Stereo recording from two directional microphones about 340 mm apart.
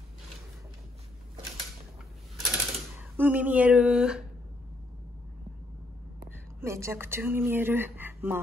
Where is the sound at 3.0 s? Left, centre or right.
Centre.